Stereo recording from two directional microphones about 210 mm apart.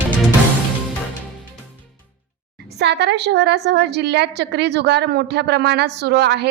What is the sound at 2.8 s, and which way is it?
A woman's voice, 55° right (ahead or behind).